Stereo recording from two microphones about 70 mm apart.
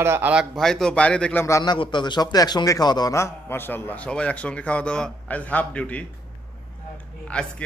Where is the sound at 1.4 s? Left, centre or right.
Left.